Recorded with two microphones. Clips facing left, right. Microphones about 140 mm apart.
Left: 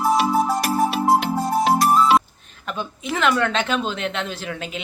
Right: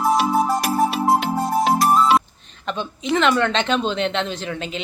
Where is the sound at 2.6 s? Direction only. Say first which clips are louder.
Right 3 dB; 5° left (ahead or behind).